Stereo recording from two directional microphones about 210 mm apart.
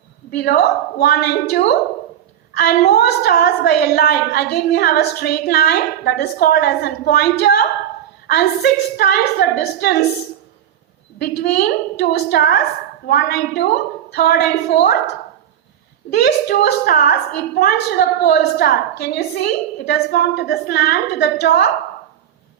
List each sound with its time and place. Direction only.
0.3 s a woman's voice: 50° left (ahead or behind)
11.2 s a woman's voice: 50° left (ahead or behind)
16.1 s a woman's voice: 50° left (ahead or behind)